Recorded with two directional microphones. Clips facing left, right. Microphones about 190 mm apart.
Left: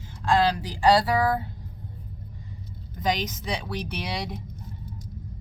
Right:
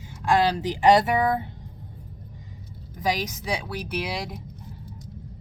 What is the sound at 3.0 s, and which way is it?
Speech, 10° right (ahead or behind).